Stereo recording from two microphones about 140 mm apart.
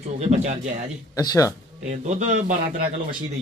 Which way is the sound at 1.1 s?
25° left (ahead or behind).